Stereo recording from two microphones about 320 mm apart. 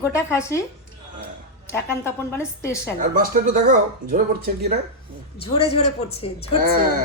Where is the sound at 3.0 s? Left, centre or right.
Right.